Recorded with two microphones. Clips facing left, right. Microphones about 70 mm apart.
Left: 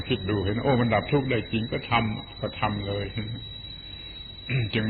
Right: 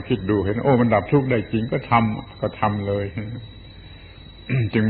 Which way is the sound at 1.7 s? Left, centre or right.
Right.